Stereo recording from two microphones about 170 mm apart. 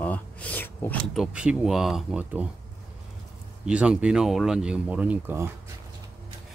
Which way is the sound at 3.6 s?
5° right (ahead or behind).